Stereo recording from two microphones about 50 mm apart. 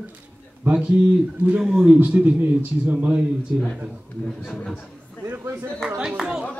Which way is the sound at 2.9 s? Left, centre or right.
Right.